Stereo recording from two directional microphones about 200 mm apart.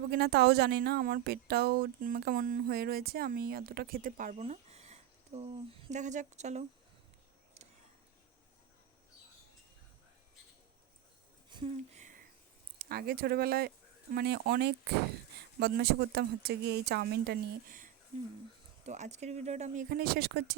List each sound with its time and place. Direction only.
0.1 s speech: 55° right (ahead or behind); by 6.7 s 35° right (ahead or behind)
11.4 s a sound: 25° right (ahead or behind)
12.8 s speech: 50° right (ahead or behind)
19.9 s speech: 50° right (ahead or behind)